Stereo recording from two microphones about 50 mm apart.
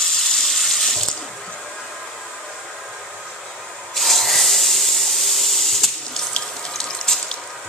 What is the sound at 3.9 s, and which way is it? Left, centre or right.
Hiss, centre.